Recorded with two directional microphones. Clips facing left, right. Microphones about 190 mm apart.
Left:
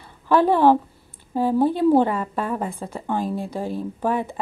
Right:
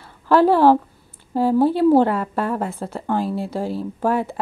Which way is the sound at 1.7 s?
5° right (ahead or behind).